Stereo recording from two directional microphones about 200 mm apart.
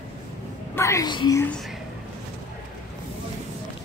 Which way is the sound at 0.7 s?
15° left (ahead or behind).